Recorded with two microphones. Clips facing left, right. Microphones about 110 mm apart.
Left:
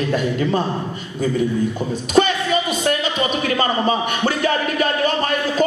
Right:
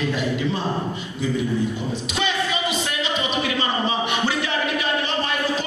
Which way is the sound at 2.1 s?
45° left (ahead or behind).